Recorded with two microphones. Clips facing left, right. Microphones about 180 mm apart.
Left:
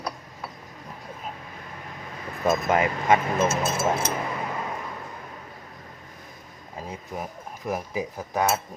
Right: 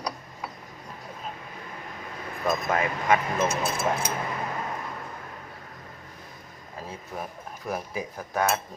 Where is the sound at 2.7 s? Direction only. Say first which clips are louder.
Left 2 dB; 25° left (ahead or behind).